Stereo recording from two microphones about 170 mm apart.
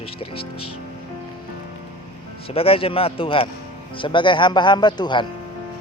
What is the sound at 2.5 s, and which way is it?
Speech, 35° left (ahead or behind).